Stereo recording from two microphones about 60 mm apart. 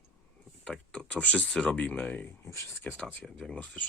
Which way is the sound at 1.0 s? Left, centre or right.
Left.